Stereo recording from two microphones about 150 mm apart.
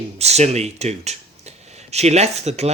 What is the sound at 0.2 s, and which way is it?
Speech, 45° right (ahead or behind).